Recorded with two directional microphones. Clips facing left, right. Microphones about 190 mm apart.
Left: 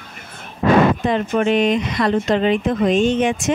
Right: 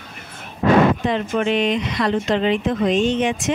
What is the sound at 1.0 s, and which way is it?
Speech, 45° left (ahead or behind).